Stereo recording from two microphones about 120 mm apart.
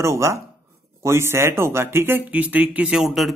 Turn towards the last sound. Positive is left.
turn(degrees=-5)  # may be behind; listen again after turning